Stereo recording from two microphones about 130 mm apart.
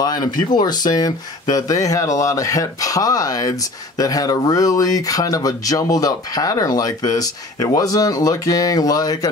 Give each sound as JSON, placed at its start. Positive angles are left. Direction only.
{"t": 0.0, "sound": "speech", "side_deg": 30}